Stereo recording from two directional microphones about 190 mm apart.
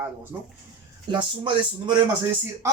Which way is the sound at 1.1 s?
25° right (ahead or behind).